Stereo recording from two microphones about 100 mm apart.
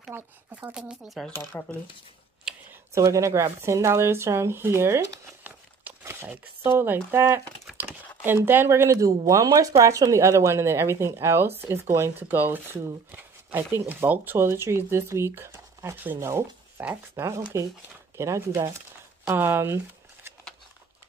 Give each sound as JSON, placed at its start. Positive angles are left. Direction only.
{"t": 0.1, "sound": "speech", "side_deg": -15}
{"t": 2.5, "sound": "computer keyboard", "side_deg": -10}
{"t": 2.9, "sound": "speech", "side_deg": -30}